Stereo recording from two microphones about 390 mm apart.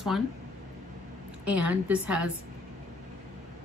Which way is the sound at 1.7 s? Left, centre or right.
Centre.